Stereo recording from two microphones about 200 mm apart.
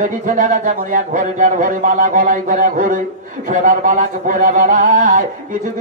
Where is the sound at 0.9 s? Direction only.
40° right (ahead or behind).